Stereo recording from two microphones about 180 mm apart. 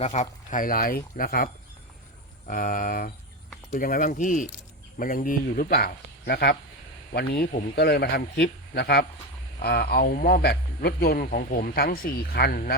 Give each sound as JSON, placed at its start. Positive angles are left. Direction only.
{"t": 0.0, "sound": "speech", "side_deg": 40}
{"t": 2.5, "sound": "speech", "side_deg": 50}